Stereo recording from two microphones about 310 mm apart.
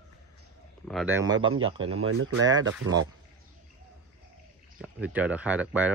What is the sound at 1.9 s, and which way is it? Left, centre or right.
Speech, right.